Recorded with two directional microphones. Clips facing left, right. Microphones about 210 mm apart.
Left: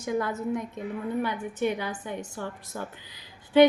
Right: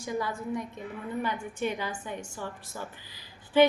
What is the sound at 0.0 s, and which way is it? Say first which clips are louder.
Speech: left 4 dB; 20° left (ahead or behind).